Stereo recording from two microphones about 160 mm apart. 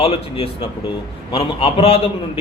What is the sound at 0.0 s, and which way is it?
Speech, 35° left (ahead or behind).